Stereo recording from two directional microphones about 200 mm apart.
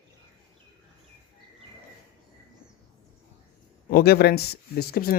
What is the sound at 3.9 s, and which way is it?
Speech, 50° left (ahead or behind).